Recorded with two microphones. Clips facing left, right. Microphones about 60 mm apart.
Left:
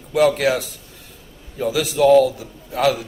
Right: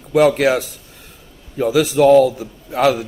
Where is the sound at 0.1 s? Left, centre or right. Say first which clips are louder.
Right 3 dB; right.